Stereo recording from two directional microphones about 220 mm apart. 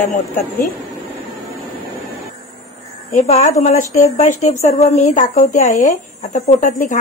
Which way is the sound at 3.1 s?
30° left (ahead or behind).